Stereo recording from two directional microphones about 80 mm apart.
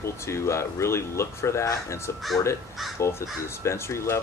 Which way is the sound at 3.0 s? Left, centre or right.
Left.